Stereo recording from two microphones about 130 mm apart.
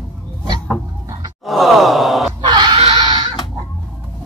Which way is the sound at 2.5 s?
35° right (ahead or behind).